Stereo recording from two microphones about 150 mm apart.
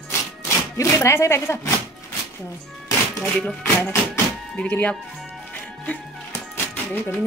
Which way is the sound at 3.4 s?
15° left (ahead or behind).